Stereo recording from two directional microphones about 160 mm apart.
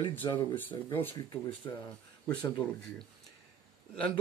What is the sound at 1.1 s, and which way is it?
Speech, 30° left (ahead or behind).